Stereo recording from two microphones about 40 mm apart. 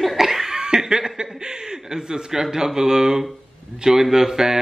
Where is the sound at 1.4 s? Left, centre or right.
Centre.